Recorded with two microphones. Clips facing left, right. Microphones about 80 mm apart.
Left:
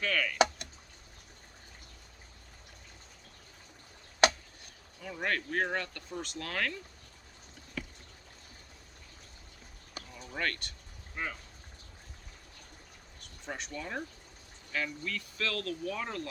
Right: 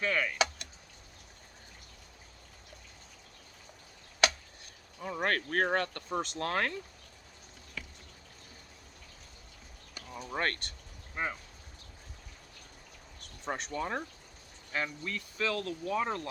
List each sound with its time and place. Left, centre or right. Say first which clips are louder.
0.0 s speech: right 1 dB; right
0.3 s a sound: left 4 dB; left
4.9 s speech: right 2 dB; right
6.3 s speech: right 1 dB; right
10.2 s speech: right 2 dB; right
11.1 s speech: right 3 dB; right
13.5 s speech: right 4 dB; right
14.7 s speech: even; right